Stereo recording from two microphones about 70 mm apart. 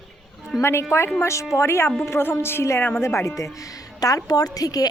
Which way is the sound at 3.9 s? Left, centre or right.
Left.